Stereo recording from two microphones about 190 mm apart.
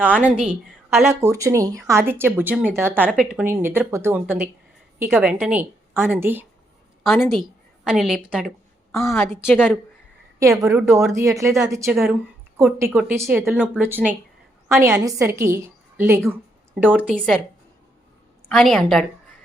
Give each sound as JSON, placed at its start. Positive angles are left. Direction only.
{"t": 0.2, "sound": "speech", "side_deg": -5}
{"t": 1.2, "sound": "speech", "side_deg": -15}
{"t": 7.0, "sound": "a woman's voice", "side_deg": 0}
{"t": 7.4, "sound": "a sound", "side_deg": 0}
{"t": 9.0, "sound": "a woman's voice", "side_deg": 15}
{"t": 9.5, "sound": "a woman's voice", "side_deg": -5}
{"t": 10.4, "sound": "a woman's voice", "side_deg": -15}
{"t": 18.4, "sound": "a woman's voice", "side_deg": 0}